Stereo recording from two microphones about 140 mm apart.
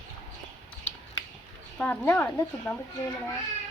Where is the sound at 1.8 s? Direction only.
15° left (ahead or behind).